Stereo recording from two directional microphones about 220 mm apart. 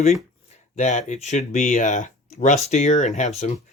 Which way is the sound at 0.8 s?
35° left (ahead or behind).